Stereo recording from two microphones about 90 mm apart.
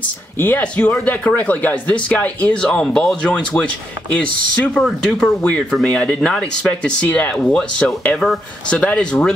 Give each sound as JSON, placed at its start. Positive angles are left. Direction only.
{"t": 0.4, "sound": "speech", "side_deg": 20}